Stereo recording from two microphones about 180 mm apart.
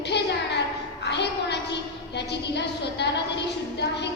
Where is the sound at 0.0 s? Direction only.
70° left (ahead or behind).